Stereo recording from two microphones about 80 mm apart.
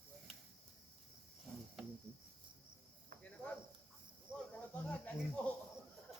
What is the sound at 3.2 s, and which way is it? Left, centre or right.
Cricket, centre.